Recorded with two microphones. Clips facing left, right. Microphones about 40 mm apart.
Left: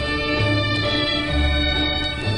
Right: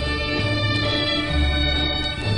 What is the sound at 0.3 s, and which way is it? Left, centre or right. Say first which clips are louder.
Music: left 2 dB; centre.